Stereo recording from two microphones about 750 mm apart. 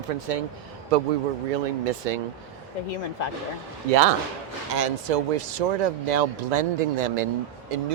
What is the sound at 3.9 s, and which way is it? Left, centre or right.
Speech, right.